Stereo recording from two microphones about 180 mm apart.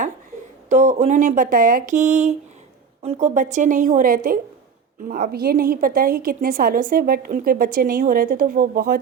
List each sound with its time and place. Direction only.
0.7 s a woman's voice: 40° right (ahead or behind)